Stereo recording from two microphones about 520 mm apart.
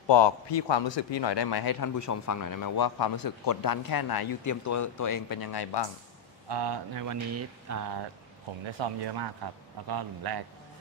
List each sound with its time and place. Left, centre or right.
0.0 s a man's voice: left
6.5 s speech: right
7.1 s speech: right
8.7 s speech: right